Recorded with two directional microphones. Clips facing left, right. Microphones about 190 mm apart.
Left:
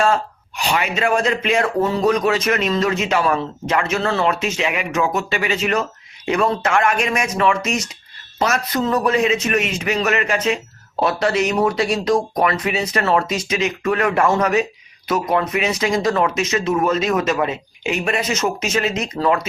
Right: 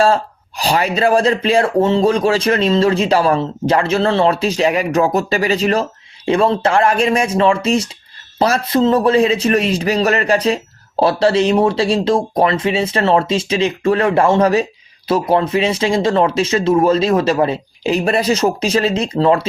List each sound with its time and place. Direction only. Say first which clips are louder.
0.0 s speech: right 4 dB; 35° right (ahead or behind)